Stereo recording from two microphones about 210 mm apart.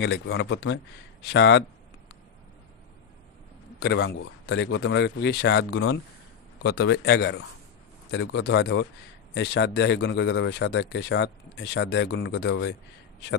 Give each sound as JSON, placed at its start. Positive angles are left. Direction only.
{"t": 0.0, "sound": "a man's voice", "side_deg": 55}
{"t": 3.8, "sound": "a man's voice", "side_deg": 55}